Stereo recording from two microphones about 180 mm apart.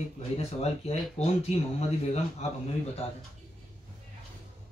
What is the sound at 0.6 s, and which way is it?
Speech, 35° left (ahead or behind).